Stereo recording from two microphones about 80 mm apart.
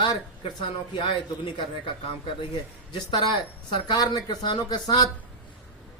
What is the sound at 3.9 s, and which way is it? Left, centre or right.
Speech, left.